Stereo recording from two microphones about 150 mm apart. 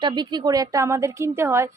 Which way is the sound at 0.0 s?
30° right (ahead or behind).